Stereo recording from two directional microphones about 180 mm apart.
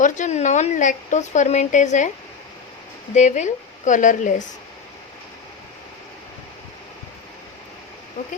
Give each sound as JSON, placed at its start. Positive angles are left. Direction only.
{"t": 0.0, "sound": "a woman's voice", "side_deg": 40}
{"t": 3.2, "sound": "speech", "side_deg": 40}